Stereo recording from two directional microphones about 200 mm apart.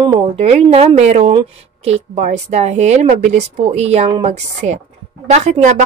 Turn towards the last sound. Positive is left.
turn(degrees=-35)  # may be behind; listen again after turning